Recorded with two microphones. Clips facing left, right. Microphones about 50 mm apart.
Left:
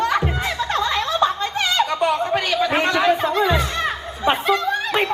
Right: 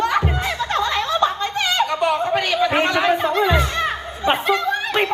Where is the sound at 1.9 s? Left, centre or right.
Centre.